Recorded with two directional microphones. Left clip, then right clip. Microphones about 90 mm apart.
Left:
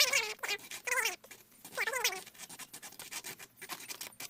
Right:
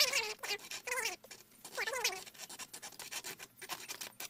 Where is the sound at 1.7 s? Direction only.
20° left (ahead or behind).